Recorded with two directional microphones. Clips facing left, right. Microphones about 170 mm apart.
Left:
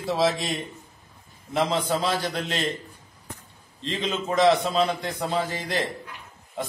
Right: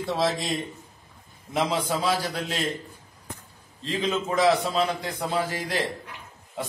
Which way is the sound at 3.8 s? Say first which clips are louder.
Right 1 dB; 5° right (ahead or behind).